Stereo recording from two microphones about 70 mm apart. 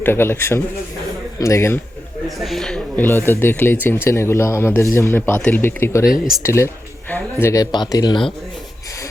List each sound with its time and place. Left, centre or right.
0.0 s speech: left
2.4 s speech: centre
2.9 s speech: left
5.6 s speech: left
6.1 s speech: centre
6.4 s speech: left
7.5 s speech: left